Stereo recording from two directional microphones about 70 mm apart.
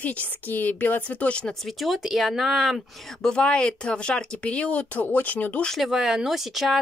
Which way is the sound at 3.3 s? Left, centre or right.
Centre.